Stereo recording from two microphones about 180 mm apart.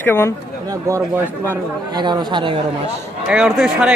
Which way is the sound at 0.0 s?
15° left (ahead or behind).